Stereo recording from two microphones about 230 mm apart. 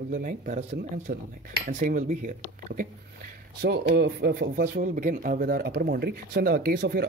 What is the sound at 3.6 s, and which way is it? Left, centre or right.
Speech, right.